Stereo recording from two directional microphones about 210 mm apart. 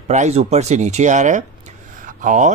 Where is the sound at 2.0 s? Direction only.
35° right (ahead or behind).